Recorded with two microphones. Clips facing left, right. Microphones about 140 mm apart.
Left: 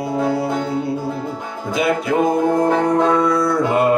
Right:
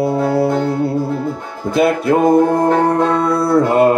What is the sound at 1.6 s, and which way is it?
Music, 60° right (ahead or behind).